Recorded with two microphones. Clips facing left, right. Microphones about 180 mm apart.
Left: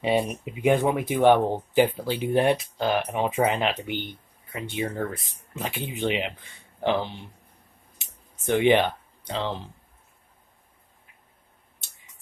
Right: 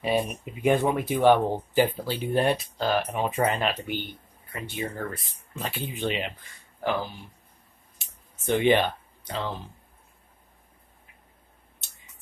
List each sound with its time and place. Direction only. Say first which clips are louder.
0.0 s speech: left 2 dB; 20° left (ahead or behind)
4.8 s speech: left 4 dB; 10° left (ahead or behind); by 7.2 s 25° left (ahead or behind)
8.0 s a sound: even; 15° left (ahead or behind)